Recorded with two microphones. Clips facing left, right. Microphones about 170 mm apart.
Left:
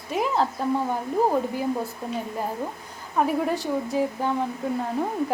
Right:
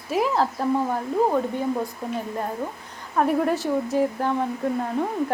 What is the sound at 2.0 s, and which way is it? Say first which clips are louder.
Speech: right 1 dB; centre (ahead or behind).